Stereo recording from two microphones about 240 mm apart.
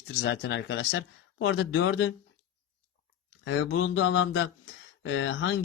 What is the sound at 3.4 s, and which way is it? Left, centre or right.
Speech, left.